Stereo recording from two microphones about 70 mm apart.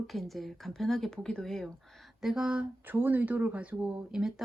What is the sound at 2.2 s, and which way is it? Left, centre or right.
Speech, centre.